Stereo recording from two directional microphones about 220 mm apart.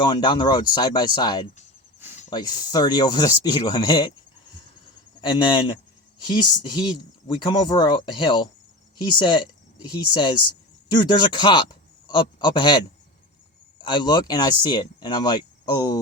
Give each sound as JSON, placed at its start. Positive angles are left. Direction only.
{"t": 0.0, "sound": "speech", "side_deg": 20}
{"t": 5.2, "sound": "speech", "side_deg": 20}
{"t": 13.8, "sound": "speech", "side_deg": 20}